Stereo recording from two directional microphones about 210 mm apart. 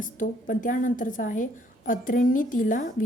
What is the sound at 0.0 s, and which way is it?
A woman's voice, 40° left (ahead or behind).